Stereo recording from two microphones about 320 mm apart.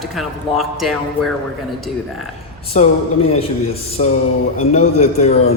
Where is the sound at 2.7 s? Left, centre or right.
Left.